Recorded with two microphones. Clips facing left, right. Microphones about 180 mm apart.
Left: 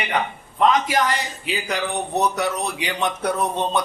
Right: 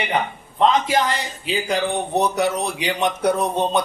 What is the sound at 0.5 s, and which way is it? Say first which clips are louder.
Speech: right 1 dB; 30° right (ahead or behind).